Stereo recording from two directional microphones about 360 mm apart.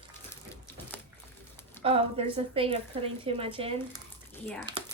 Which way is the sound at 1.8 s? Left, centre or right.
Centre.